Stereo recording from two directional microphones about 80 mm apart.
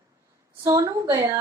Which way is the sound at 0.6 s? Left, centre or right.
Right.